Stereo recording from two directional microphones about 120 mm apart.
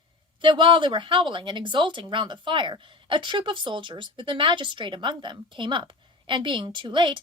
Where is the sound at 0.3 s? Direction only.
45° right (ahead or behind).